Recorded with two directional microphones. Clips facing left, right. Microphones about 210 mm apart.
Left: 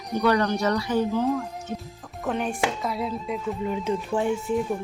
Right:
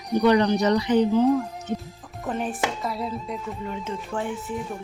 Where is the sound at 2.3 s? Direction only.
Centre (ahead or behind).